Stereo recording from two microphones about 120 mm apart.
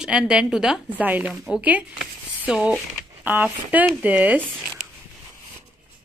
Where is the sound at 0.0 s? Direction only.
5° right (ahead or behind).